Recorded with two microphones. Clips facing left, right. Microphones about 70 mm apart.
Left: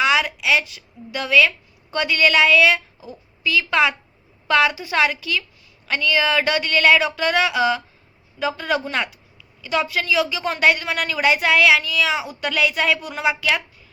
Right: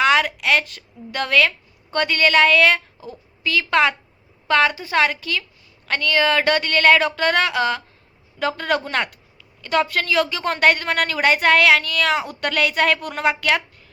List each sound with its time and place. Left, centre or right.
0.0 s a woman's voice: right